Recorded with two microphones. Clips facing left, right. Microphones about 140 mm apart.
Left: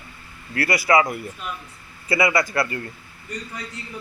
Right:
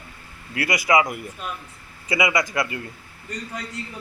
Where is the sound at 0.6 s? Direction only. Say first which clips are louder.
Left 1 dB; 15° right (ahead or behind).